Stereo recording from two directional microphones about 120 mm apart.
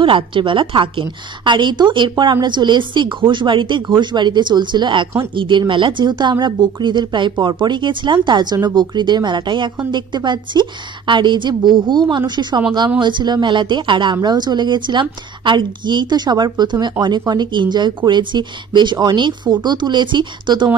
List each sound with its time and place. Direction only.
0.0 s a woman's voice: 45° right (ahead or behind)